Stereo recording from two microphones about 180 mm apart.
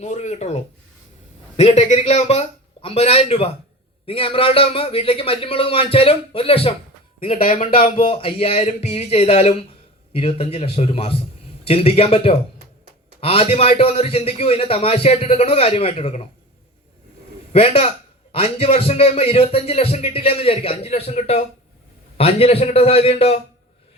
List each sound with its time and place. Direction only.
0.0 s a man's voice: 40° left (ahead or behind)
17.5 s a man's voice: 35° left (ahead or behind)